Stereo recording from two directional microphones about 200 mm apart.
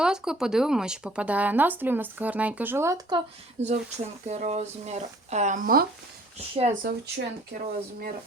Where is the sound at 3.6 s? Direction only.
35° right (ahead or behind).